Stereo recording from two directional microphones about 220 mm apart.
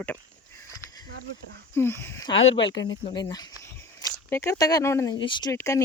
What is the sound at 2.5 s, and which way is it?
Speech, 55° left (ahead or behind).